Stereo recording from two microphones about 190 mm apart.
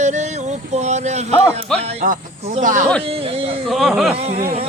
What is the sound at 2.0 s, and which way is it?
Speech, 40° right (ahead or behind).